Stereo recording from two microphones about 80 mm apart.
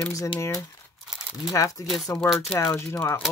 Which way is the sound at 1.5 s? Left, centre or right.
Left.